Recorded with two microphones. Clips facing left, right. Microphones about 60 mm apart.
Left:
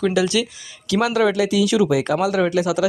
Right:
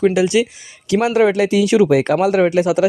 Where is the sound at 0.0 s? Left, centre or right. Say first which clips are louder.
Right 5 dB; right.